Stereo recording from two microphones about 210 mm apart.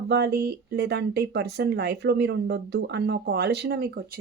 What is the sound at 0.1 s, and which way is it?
A woman's voice, 50° right (ahead or behind).